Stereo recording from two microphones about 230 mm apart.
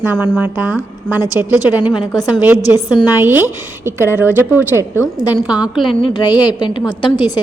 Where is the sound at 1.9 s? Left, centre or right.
Centre.